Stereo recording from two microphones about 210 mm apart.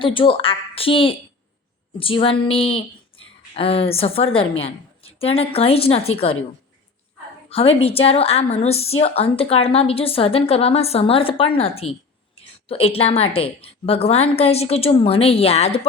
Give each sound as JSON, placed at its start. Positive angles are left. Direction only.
{"t": 0.0, "sound": "a woman's voice", "side_deg": 25}
{"t": 7.5, "sound": "a woman's voice", "side_deg": 25}